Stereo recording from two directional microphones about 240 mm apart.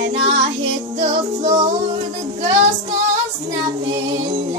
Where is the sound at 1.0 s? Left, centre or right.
Right.